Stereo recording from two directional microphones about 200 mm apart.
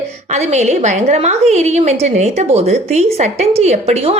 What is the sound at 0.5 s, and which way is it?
A woman's voice, 35° right (ahead or behind).